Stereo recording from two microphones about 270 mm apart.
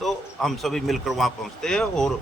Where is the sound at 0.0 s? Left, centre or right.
Centre.